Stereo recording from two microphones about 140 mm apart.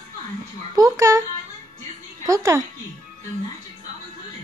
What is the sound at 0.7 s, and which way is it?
A child's voice, 20° right (ahead or behind).